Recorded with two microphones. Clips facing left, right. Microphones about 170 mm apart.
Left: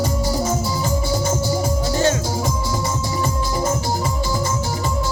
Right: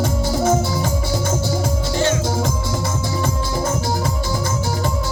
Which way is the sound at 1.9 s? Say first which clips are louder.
Even; 40° left (ahead or behind).